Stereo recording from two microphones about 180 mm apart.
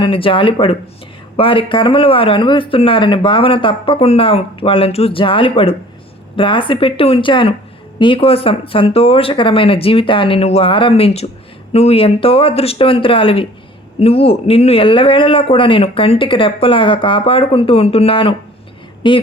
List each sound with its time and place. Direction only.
0.0 s speech: 30° left (ahead or behind)